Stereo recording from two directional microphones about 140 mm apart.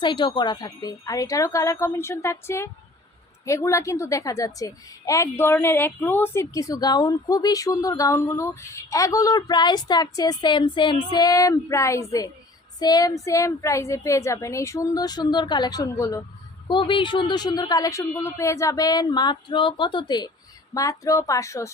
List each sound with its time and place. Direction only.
0.0 s a woman's voice: 35° left (ahead or behind)
16.6 s a woman's voice: 35° left (ahead or behind)